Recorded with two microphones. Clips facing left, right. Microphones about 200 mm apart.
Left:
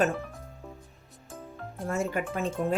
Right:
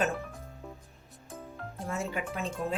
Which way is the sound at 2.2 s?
45° left (ahead or behind).